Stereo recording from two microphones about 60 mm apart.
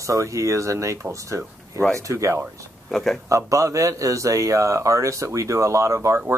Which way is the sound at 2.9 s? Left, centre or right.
Centre.